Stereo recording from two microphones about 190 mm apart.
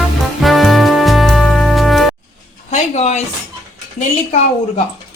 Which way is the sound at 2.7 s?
35° left (ahead or behind).